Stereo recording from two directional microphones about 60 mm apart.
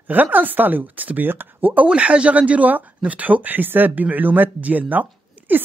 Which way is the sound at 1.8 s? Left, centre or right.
Centre.